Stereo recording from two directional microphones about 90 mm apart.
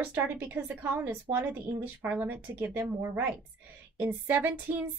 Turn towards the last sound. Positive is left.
turn(degrees=-20)  # may be behind; listen again after turning